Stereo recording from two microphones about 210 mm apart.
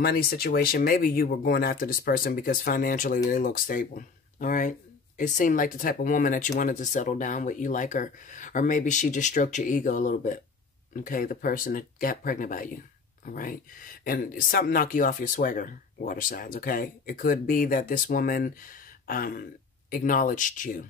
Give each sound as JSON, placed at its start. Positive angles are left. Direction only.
{"t": 0.0, "sound": "speech", "side_deg": 45}